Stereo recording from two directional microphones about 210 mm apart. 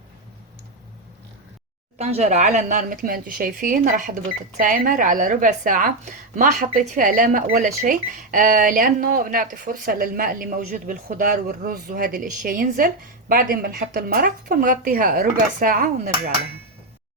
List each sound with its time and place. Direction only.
2.0 s a woman's voice: 30° right (ahead or behind)